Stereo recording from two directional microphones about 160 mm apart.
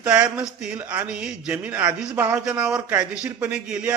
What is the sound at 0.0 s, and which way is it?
A man's voice, 5° right (ahead or behind).